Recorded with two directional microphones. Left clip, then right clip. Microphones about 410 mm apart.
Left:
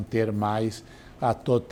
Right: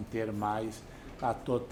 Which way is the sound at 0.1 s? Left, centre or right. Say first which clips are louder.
Left 7 dB; left.